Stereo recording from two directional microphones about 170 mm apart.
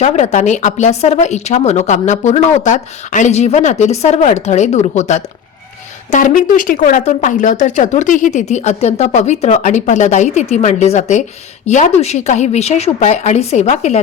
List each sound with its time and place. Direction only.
0.0 s a woman's voice: 45° left (ahead or behind)